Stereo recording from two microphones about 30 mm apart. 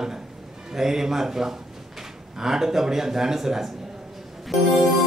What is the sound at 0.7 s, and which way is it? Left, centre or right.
Speech, centre.